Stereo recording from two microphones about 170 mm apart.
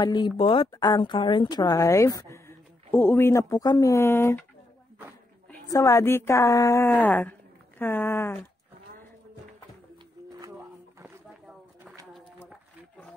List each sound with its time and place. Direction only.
0.0 s speech: 25° left (ahead or behind)
5.5 s a woman's voice: 20° left (ahead or behind)